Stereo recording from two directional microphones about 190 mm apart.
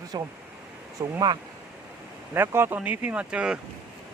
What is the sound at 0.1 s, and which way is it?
Speech, 20° right (ahead or behind).